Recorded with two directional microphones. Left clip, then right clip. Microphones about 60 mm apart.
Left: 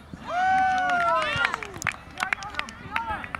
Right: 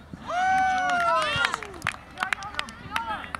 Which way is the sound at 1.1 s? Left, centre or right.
Right.